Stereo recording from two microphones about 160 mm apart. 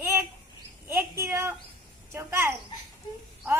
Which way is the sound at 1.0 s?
15° right (ahead or behind).